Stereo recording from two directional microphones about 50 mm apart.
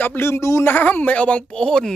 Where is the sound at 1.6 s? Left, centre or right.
Centre.